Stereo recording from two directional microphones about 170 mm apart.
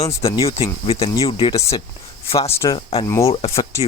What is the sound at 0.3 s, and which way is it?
Speech, 30° left (ahead or behind).